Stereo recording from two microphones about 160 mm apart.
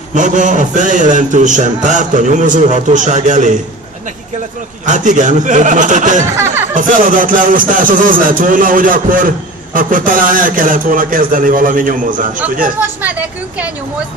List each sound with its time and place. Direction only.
0.1 s a man's voice: 50° right (ahead or behind)
4.8 s a man's voice: 50° right (ahead or behind)
6.3 s a sound: 15° right (ahead or behind)
6.7 s speech: 55° right (ahead or behind)
13.0 s speech: 10° right (ahead or behind)